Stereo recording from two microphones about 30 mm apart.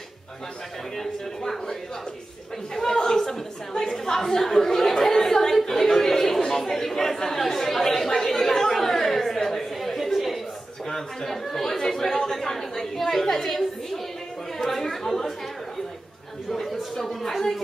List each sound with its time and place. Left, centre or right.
0.9 s speech: centre
2.7 s a woman's voice: centre
3.9 s chatter: centre
9.9 s a sound: centre
10.9 s chatter: centre
13.5 s a sound: centre
14.6 s speech: centre
16.4 s a sound: centre
17.3 s speech: centre